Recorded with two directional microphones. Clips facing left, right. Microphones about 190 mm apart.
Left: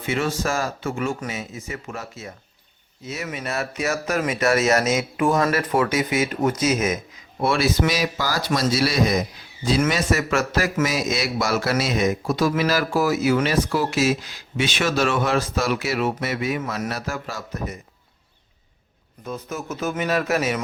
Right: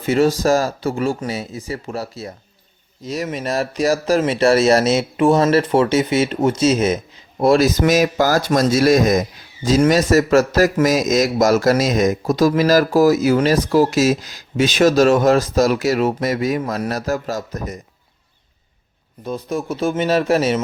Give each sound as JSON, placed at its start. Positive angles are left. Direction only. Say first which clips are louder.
{"t": 0.0, "sound": "a man's voice", "louder": "right 8 dB", "side_deg": -40}
{"t": 19.2, "sound": "a man's voice", "louder": "right 7 dB", "side_deg": -35}